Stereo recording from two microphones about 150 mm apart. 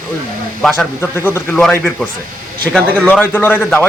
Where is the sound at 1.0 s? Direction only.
15° left (ahead or behind).